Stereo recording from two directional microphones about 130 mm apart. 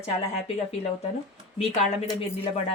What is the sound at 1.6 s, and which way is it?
Speech, 50° left (ahead or behind).